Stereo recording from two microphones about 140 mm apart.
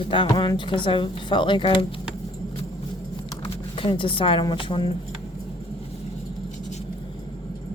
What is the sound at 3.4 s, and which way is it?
Speech, 35° left (ahead or behind).